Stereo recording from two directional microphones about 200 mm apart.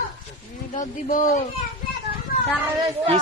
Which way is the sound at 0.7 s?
40° left (ahead or behind).